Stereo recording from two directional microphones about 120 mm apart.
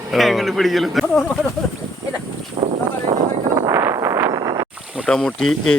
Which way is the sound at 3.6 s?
25° right (ahead or behind).